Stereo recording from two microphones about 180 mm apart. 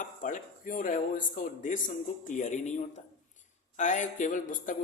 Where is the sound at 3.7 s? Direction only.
40° left (ahead or behind).